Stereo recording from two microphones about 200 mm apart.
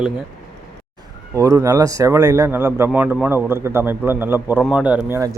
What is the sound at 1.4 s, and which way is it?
A man's voice, 15° right (ahead or behind).